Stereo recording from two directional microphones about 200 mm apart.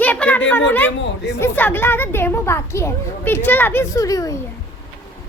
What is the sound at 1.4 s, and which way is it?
A woman's voice, 10° left (ahead or behind).